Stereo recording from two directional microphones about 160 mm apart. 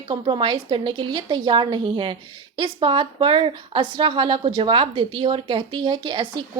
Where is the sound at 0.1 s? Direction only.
30° right (ahead or behind).